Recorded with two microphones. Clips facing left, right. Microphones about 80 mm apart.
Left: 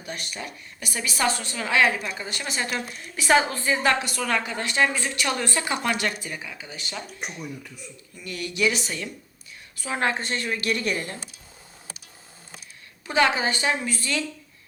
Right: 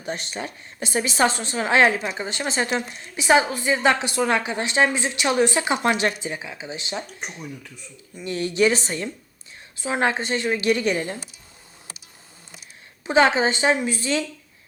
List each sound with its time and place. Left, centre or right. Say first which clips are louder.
0.0 s a woman's voice: right 5 dB; right
8.1 s speech: right 7 dB; right
9.7 s a woman's voice: right 3 dB; right
13.1 s a woman's voice: right 4 dB; right